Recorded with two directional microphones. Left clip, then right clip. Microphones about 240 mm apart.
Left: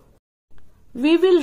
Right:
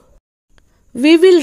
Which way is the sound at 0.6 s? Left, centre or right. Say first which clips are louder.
Right 6 dB; right.